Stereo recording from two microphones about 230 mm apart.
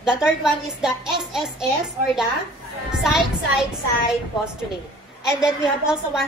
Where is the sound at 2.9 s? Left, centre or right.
Centre.